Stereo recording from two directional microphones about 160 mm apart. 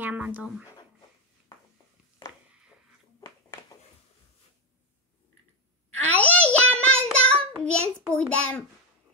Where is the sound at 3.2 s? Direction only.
25° left (ahead or behind).